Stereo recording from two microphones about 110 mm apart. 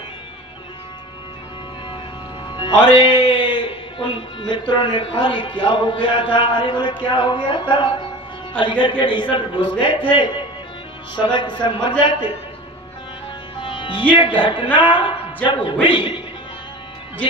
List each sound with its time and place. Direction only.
2.5 s speech: 45° left (ahead or behind)
13.6 s music: 50° left (ahead or behind)
14.1 s a man's voice: 45° left (ahead or behind)